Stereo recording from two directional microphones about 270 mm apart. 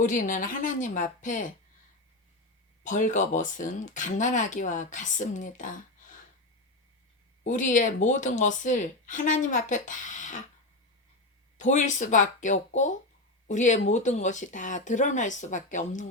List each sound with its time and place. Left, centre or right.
0.0 s speech: left
2.8 s speech: left
7.4 s speech: left
11.5 s speech: left